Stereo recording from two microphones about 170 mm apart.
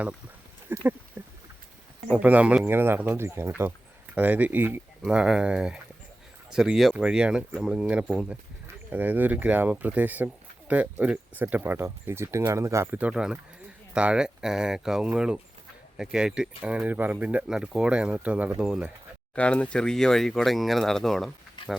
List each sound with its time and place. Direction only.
0.7 s speech: 10° right (ahead or behind)
1.2 s rowboat: 20° right (ahead or behind)
2.0 s speech: 10° right (ahead or behind)
19.4 s speech: 5° left (ahead or behind)